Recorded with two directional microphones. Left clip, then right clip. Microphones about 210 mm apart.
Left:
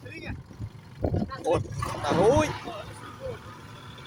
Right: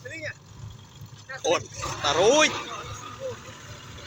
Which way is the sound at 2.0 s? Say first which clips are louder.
Right 3 dB; 15° left (ahead or behind).